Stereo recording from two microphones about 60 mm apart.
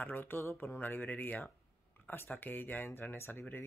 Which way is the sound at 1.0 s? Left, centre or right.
Left.